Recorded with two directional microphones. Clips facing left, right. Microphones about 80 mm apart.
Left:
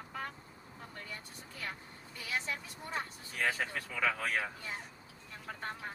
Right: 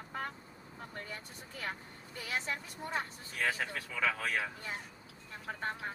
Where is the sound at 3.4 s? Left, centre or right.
Centre.